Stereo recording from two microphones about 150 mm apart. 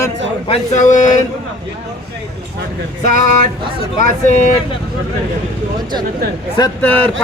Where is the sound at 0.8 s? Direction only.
55° left (ahead or behind).